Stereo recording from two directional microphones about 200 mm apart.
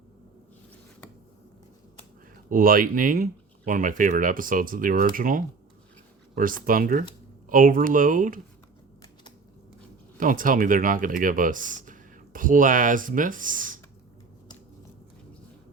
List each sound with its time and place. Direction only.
2.5 s speech: 45° right (ahead or behind)
10.2 s speech: 40° right (ahead or behind)